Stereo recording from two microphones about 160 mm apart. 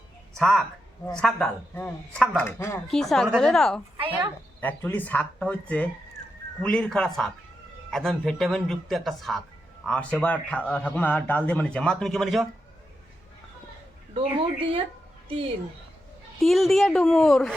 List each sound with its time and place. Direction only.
0.3 s a woman's voice: centre (ahead or behind)
2.9 s a man's voice: centre (ahead or behind)
14.2 s speech: 35° right (ahead or behind)
16.4 s speech: centre (ahead or behind)